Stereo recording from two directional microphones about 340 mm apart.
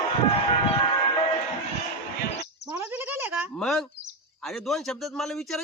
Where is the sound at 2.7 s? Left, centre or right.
Centre.